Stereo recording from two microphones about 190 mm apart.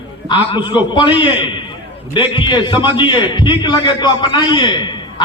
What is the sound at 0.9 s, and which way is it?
A man's voice, 25° left (ahead or behind).